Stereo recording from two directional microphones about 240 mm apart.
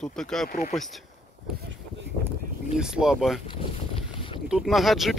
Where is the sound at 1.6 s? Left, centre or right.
Right.